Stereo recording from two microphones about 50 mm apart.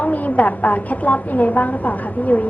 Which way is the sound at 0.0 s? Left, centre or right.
Left.